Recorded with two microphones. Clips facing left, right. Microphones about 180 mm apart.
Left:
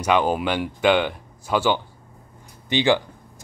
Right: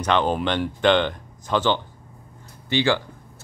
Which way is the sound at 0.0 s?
10° left (ahead or behind).